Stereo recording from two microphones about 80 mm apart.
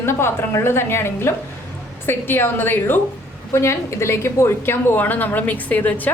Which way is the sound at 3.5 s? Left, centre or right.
Left.